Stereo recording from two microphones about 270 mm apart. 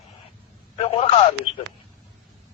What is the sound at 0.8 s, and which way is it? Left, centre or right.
Speech, left.